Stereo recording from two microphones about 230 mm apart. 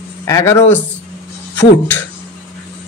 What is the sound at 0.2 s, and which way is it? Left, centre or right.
Speech, centre.